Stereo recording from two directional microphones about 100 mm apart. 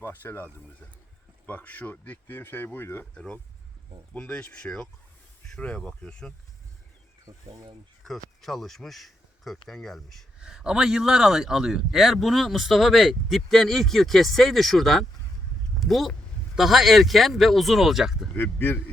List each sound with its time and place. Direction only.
0.0 s speech: 20° left (ahead or behind)
3.2 s speech: 10° left (ahead or behind)
7.3 s speech: 35° right (ahead or behind)
8.0 s speech: centre (ahead or behind)
18.3 s speech: 20° left (ahead or behind)